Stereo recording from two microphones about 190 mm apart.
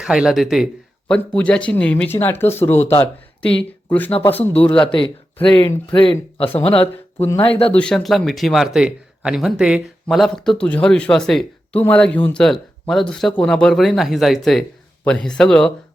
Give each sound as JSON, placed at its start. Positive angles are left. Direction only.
{"t": 0.0, "sound": "speech", "side_deg": -5}
{"t": 4.5, "sound": "speech", "side_deg": 10}
{"t": 4.8, "sound": "speech", "side_deg": 25}
{"t": 7.2, "sound": "speech", "side_deg": 10}
{"t": 7.5, "sound": "speech", "side_deg": 30}
{"t": 7.8, "sound": "speech", "side_deg": 5}